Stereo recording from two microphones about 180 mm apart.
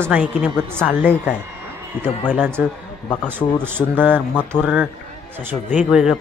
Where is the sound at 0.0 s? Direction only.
10° right (ahead or behind).